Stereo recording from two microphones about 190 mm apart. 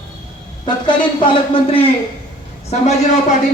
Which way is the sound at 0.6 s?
25° left (ahead or behind).